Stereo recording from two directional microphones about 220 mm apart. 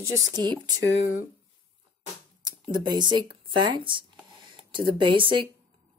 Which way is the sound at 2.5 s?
20° right (ahead or behind).